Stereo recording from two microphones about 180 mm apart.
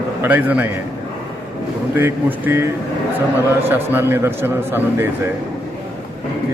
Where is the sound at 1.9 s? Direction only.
10° right (ahead or behind).